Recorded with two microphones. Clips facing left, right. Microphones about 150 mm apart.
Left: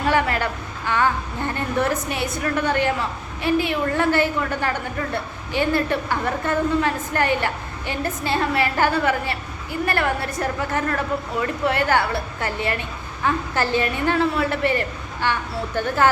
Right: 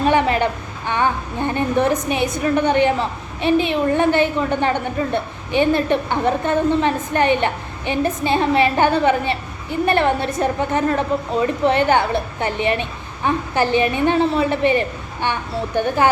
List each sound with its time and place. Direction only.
0.0 s a woman's voice: 20° right (ahead or behind)